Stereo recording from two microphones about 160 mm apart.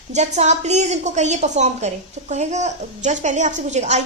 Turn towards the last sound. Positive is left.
turn(degrees=-45)  # may be behind; listen again after turning